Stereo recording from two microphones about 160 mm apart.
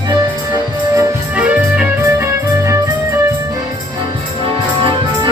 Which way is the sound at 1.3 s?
10° right (ahead or behind).